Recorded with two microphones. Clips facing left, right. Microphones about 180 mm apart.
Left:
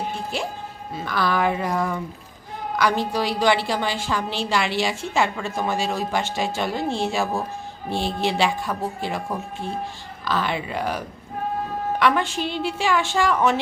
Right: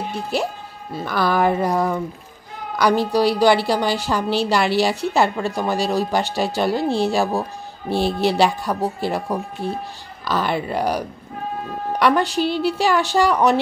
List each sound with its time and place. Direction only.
0.9 s a woman's voice: 40° right (ahead or behind)